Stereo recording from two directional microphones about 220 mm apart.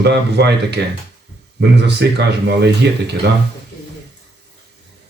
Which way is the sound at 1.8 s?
50° right (ahead or behind).